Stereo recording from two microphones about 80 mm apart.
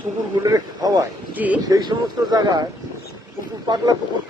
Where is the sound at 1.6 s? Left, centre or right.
Right.